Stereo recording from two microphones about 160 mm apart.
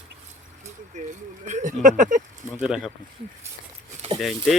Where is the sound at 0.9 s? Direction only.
50° right (ahead or behind).